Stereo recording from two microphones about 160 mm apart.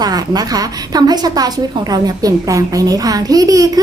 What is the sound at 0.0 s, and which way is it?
A woman's voice, 25° right (ahead or behind).